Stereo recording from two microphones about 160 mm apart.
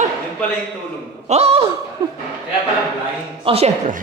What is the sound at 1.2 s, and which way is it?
Speech, 40° right (ahead or behind).